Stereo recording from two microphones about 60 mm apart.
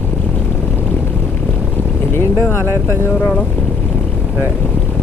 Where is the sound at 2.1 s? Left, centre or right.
Left.